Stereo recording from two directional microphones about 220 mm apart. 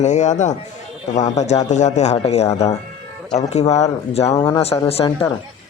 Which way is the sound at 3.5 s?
30° left (ahead or behind).